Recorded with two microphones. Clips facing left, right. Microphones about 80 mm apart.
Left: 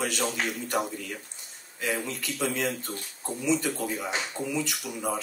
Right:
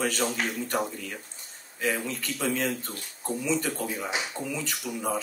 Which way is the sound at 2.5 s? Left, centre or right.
Right.